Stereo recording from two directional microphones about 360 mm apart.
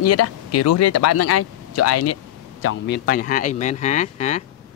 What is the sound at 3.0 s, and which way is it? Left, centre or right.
Speech, left.